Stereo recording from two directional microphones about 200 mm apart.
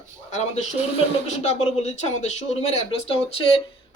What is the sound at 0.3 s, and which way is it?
Speech, 35° left (ahead or behind).